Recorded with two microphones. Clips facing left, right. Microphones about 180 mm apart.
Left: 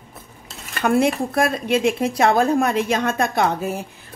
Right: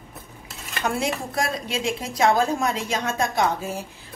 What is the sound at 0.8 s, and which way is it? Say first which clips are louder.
Speech: left 8 dB; 55° left (ahead or behind).